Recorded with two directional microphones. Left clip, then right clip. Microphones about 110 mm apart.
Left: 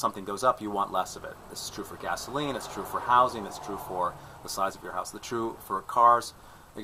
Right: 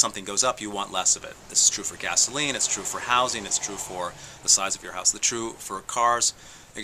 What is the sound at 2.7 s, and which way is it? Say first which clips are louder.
Speech: left 3 dB; 25° right (ahead or behind).